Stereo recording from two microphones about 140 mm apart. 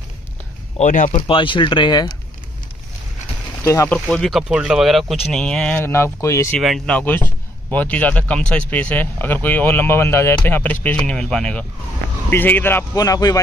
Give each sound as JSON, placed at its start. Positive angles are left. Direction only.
{"t": 0.7, "sound": "speech", "side_deg": 65}
{"t": 1.1, "sound": "speech", "side_deg": 40}
{"t": 3.6, "sound": "speech", "side_deg": 20}
{"t": 3.9, "sound": "speech", "side_deg": 5}
{"t": 5.8, "sound": "speech", "side_deg": 20}
{"t": 6.6, "sound": "speech", "side_deg": 0}
{"t": 7.0, "sound": "speech", "side_deg": 15}
{"t": 12.9, "sound": "speech", "side_deg": 25}